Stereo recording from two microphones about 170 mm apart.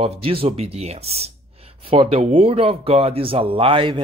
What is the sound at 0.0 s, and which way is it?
Speech, 35° right (ahead or behind).